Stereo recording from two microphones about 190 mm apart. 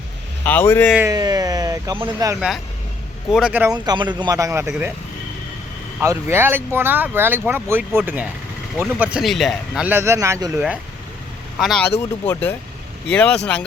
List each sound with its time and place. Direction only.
0.4 s speech: 10° left (ahead or behind)
1.0 s speech: 20° right (ahead or behind)
2.3 s speech: 5° right (ahead or behind)
3.7 s speech: 20° right (ahead or behind)
6.0 s speech: 10° right (ahead or behind)
11.6 s speech: centre (ahead or behind)
11.9 s speech: 10° left (ahead or behind)